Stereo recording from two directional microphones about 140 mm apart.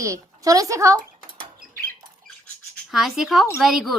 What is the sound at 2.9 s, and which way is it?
Speech, centre (ahead or behind).